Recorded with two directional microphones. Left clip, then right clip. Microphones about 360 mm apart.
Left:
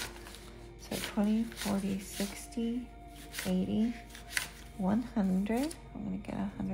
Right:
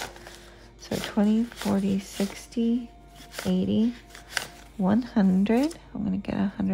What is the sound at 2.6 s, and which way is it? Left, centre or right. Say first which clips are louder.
Speech: right 9 dB; right.